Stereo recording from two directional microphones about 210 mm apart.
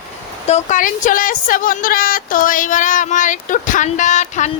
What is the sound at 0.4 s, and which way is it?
A woman's voice, 35° left (ahead or behind).